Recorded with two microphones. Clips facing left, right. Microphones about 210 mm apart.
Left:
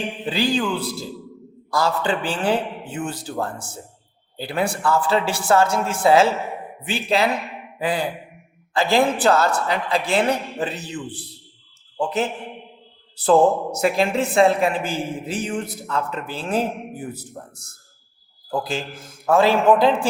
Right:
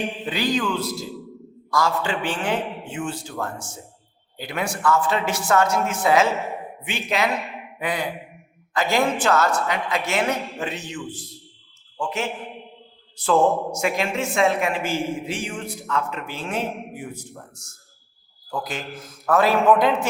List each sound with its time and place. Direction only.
0.3 s a man's voice: 30° left (ahead or behind)
0.9 s a man's voice: centre (ahead or behind)
1.7 s a man's voice: 35° left (ahead or behind)
7.8 s a sound: 30° left (ahead or behind)
8.7 s a woman's voice: 30° left (ahead or behind)
16.7 s a man's voice: centre (ahead or behind)
17.0 s a man's voice: 35° left (ahead or behind)